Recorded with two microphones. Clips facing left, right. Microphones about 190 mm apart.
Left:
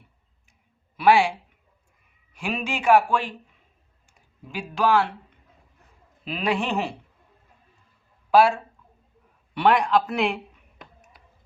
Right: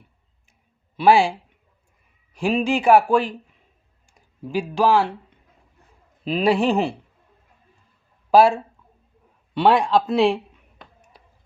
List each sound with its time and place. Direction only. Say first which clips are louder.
0.9 s speech: right 3 dB; 30° right (ahead or behind)
4.5 s speech: right 3 dB; 35° right (ahead or behind)
6.2 s speech: right 7 dB; 35° right (ahead or behind)
8.3 s speech: right 3 dB; 30° right (ahead or behind)